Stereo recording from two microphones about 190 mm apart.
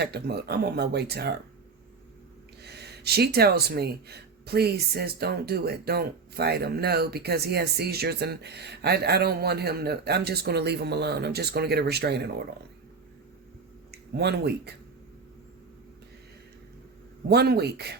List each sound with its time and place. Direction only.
0.0 s speech: 60° right (ahead or behind)
2.6 s speech: 60° right (ahead or behind)
13.9 s speech: 60° right (ahead or behind)
17.2 s speech: 55° right (ahead or behind)